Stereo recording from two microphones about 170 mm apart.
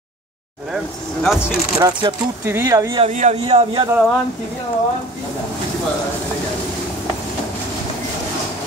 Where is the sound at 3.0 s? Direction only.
45° right (ahead or behind).